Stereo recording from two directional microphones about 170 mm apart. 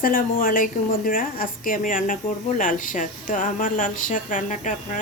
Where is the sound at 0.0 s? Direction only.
55° left (ahead or behind).